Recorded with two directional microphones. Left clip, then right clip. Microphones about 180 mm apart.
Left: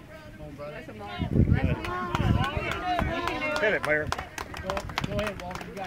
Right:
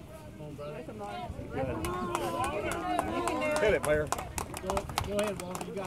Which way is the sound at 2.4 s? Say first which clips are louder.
Left 3 dB; 40° left (ahead or behind).